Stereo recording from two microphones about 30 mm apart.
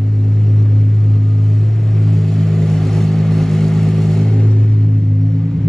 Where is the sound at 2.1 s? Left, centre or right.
Centre.